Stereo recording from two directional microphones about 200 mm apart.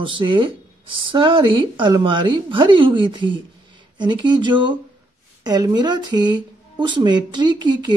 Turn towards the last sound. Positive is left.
turn(degrees=-20)  # may be behind; listen again after turning